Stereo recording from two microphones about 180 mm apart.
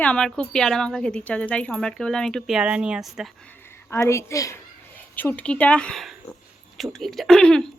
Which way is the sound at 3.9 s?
15° left (ahead or behind).